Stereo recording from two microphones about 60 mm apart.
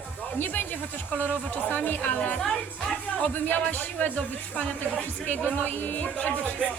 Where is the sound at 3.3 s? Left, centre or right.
Left.